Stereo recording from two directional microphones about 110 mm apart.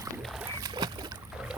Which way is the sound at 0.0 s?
30° right (ahead or behind).